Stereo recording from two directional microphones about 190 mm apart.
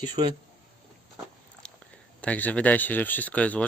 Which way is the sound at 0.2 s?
25° right (ahead or behind).